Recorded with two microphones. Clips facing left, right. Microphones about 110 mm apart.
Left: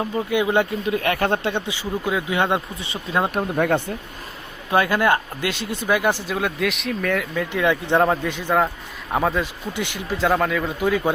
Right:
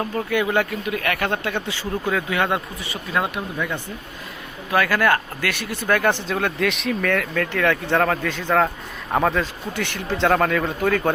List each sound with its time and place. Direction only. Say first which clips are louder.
0.0 s speech: left 1 dB; 15° left (ahead or behind)
3.3 s speech: left 7 dB; 55° left (ahead or behind)
4.7 s speech: left 1 dB; 25° left (ahead or behind); by 9.4 s 5° left (ahead or behind)
9.4 s speech: even; 15° left (ahead or behind)
10.0 s speech: right 1 dB; 5° left (ahead or behind)